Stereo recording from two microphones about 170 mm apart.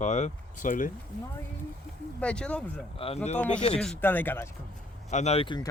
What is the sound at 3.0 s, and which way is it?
Speech, 35° left (ahead or behind).